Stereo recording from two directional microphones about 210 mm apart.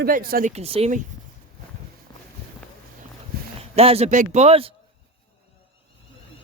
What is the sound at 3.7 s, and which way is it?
A man's voice, 30° right (ahead or behind).